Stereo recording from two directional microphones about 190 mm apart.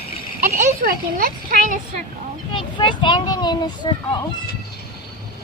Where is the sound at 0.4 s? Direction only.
50° right (ahead or behind).